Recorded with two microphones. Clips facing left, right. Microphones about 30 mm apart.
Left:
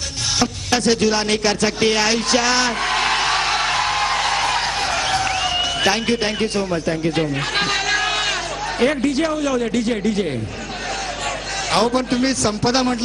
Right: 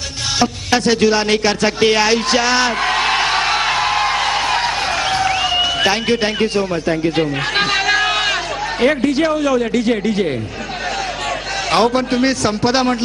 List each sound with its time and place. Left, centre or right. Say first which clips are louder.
0.3 s music: right 4 dB; centre
8.8 s a man's voice: right 3 dB; centre
11.7 s a man's voice: right 3 dB; centre